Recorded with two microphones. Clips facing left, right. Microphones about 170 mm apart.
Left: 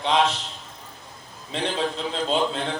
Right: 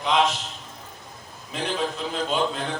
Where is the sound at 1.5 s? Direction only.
30° left (ahead or behind).